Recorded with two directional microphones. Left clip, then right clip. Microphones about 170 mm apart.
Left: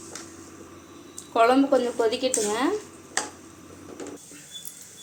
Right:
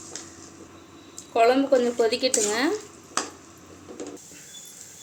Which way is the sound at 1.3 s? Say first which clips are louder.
Even; 5° right (ahead or behind).